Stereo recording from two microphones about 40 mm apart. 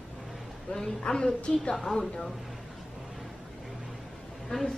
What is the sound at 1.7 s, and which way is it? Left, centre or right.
Speech, centre.